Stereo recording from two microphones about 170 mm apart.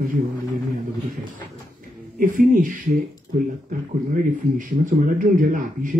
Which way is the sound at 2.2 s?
55° right (ahead or behind).